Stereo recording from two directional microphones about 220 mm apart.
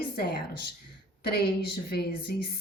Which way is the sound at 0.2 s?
45° left (ahead or behind).